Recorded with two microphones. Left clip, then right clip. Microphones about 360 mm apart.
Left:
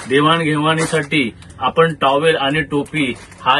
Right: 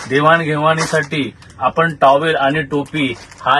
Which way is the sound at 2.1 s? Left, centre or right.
Centre.